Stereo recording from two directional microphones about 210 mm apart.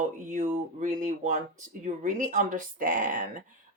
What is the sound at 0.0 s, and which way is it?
A woman's voice, 40° right (ahead or behind).